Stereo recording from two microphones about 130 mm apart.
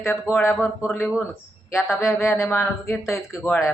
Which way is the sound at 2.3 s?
20° left (ahead or behind).